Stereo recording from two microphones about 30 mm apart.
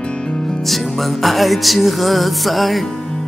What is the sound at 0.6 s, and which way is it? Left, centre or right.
Music, centre.